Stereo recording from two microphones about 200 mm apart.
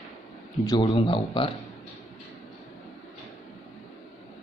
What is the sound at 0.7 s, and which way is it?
Speech, 25° left (ahead or behind).